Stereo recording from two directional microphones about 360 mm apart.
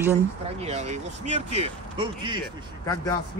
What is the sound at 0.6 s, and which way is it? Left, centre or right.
Speech, centre.